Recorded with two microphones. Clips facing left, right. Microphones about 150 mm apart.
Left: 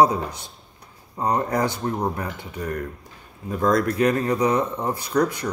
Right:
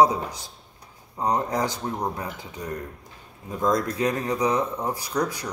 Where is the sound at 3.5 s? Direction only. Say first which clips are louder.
Left 3 dB; 15° right (ahead or behind).